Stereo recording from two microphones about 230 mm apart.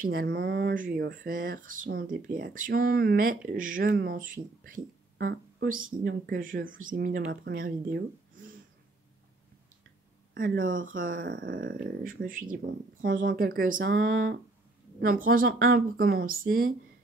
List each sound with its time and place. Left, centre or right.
0.0 s speech: right
10.3 s speech: right
11.2 s a sound: right
11.5 s speech: right
13.1 s a sound: right
13.4 s speech: right
15.0 s speech: right